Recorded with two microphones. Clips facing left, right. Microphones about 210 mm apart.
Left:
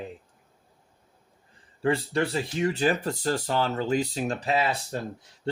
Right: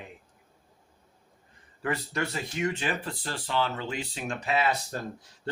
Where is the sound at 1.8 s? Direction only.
30° left (ahead or behind).